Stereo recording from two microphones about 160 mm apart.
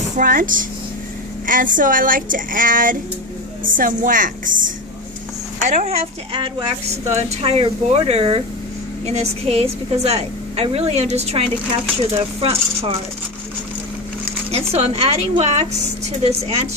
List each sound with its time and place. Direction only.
0.2 s speech: 60° right (ahead or behind)
5.6 s a woman's voice: 45° right (ahead or behind)
14.5 s a woman's voice: 40° right (ahead or behind)